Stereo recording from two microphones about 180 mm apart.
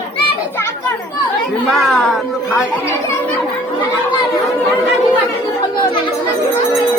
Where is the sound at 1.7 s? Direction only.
Centre (ahead or behind).